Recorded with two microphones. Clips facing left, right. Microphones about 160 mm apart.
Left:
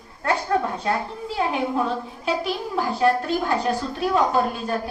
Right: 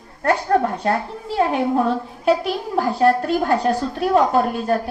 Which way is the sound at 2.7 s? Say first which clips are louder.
Right 4 dB; 45° right (ahead or behind).